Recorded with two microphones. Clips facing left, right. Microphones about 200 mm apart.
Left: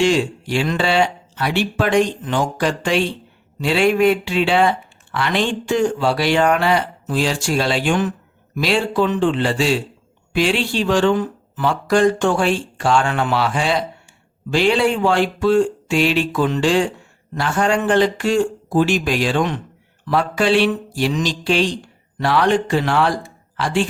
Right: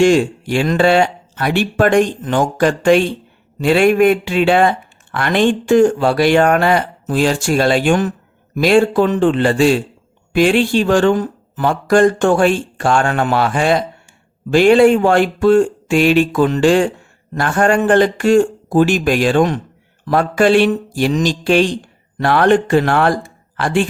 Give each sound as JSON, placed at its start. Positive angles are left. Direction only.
{"t": 0.0, "sound": "speech", "side_deg": -50}